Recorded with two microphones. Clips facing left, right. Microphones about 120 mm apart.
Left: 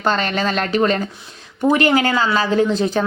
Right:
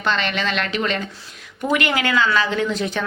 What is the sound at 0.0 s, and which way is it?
Speech, 40° left (ahead or behind).